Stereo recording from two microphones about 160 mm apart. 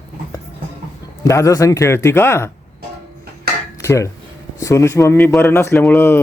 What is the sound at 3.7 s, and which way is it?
Dishes, 20° left (ahead or behind).